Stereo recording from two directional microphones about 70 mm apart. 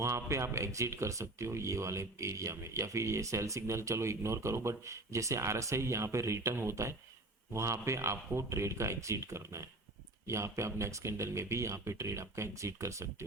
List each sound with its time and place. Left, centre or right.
0.0 s speech: right